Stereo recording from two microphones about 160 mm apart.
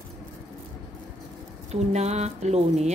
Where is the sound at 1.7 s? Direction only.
45° right (ahead or behind).